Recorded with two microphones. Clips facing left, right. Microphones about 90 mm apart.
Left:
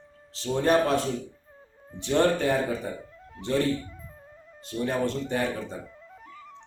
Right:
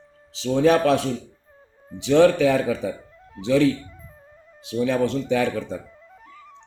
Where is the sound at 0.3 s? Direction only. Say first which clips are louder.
Right 5 dB; 90° right.